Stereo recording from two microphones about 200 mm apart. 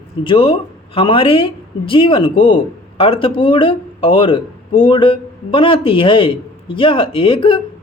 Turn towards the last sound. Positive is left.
turn(degrees=25)  # may be behind; listen again after turning